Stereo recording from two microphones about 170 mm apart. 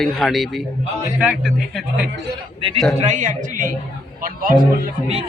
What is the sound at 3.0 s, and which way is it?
A man's voice, 45° right (ahead or behind).